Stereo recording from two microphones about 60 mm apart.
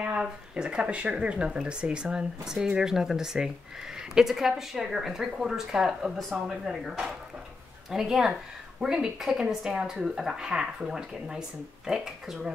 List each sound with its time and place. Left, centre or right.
0.2 s a woman's voice: centre